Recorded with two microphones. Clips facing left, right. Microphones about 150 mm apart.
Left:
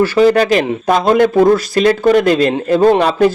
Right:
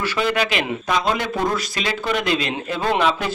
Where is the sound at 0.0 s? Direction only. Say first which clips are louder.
Left 11 dB; 40° left (ahead or behind).